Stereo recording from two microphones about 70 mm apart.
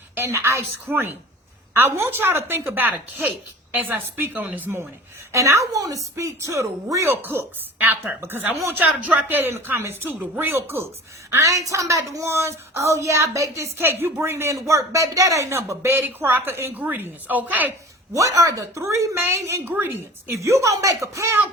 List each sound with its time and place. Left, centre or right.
0.2 s a woman's voice: right
5.3 s a woman's voice: right
7.2 s a woman's voice: right
11.3 s a woman's voice: right
16.7 s a woman's voice: right
18.1 s a woman's voice: right